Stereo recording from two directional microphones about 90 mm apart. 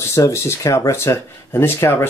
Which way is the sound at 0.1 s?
35° left (ahead or behind).